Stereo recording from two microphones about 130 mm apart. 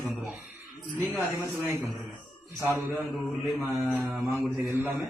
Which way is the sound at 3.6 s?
15° right (ahead or behind).